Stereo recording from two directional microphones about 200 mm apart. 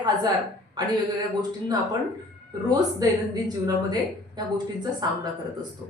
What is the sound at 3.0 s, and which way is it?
A woman's voice, 20° right (ahead or behind).